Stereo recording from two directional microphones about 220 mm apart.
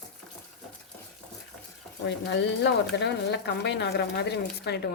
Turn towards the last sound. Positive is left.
turn(degrees=50)  # may be behind; listen again after turning